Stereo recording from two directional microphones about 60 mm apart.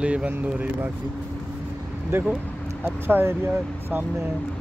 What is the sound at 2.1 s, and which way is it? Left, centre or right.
Speech, right.